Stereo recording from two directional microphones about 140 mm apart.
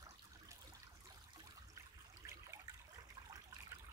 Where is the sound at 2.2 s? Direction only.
25° right (ahead or behind).